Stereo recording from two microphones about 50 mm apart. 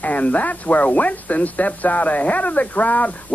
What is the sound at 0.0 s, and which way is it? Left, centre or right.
Speech, left.